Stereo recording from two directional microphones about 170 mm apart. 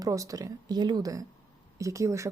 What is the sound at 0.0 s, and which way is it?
Speech, 20° right (ahead or behind).